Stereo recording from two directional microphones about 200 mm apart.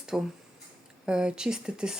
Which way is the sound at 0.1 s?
5° right (ahead or behind).